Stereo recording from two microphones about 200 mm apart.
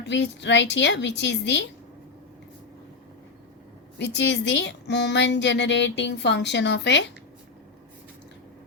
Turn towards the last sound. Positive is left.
turn(degrees=60)  # may be behind; listen again after turning